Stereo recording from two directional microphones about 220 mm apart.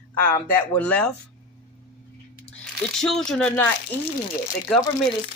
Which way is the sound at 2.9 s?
Centre (ahead or behind).